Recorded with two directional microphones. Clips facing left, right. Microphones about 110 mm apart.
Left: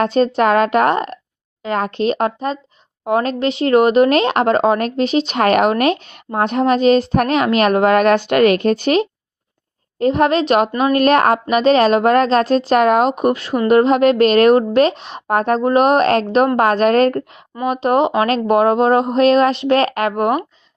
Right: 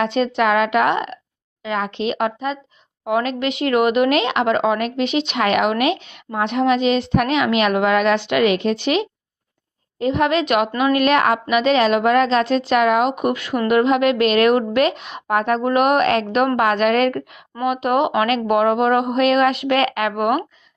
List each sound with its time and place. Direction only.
0.0 s a woman's voice: 40° left (ahead or behind)